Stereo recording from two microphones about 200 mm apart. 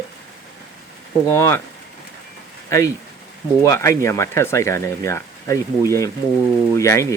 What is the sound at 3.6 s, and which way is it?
Speech, 15° left (ahead or behind).